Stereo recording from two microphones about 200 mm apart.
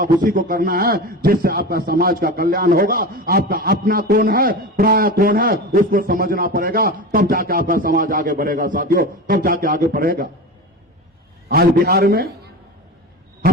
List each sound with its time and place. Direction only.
0.0 s a man's voice: 45° right (ahead or behind)
11.4 s a man's voice: 50° right (ahead or behind)